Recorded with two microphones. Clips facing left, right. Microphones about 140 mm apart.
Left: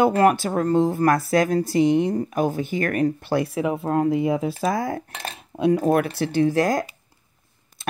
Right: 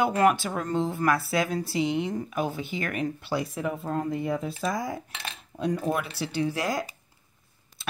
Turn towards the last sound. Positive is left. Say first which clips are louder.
# left 8 dB
turn(degrees=45)  # may be behind; listen again after turning